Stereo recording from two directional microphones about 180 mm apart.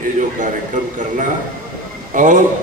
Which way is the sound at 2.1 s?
45° right (ahead or behind).